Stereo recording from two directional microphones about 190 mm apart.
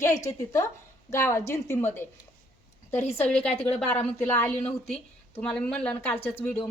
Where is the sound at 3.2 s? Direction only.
5° left (ahead or behind).